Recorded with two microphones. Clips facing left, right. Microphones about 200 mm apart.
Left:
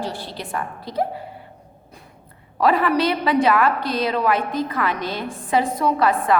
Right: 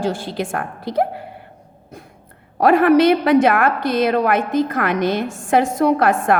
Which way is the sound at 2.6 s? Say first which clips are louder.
Right 6 dB; 50° right (ahead or behind).